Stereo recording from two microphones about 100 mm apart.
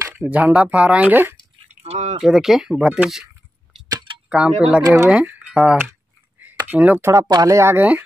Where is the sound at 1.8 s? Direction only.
90° right.